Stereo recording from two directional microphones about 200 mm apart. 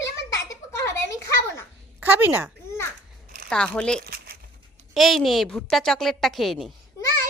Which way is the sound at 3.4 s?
5° left (ahead or behind).